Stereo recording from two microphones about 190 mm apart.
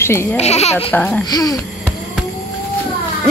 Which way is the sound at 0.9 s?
5° left (ahead or behind).